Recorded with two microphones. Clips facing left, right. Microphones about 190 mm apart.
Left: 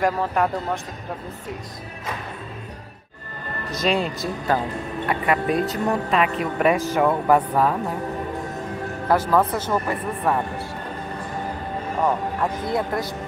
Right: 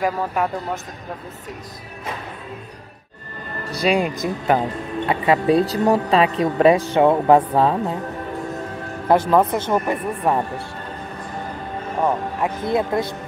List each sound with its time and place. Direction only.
0.0 s speech: 5° right (ahead or behind)
3.7 s speech: 10° right (ahead or behind)
9.1 s speech: 20° right (ahead or behind)
12.0 s speech: 15° right (ahead or behind)